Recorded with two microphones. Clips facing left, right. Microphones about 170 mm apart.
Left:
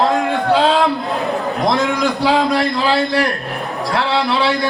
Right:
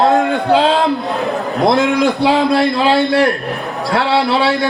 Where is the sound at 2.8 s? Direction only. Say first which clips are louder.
Right 4 dB; 25° right (ahead or behind).